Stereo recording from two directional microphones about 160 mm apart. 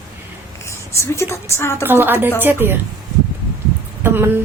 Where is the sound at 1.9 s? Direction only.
15° right (ahead or behind).